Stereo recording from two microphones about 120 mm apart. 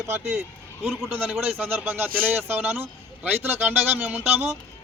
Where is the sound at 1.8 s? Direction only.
15° right (ahead or behind).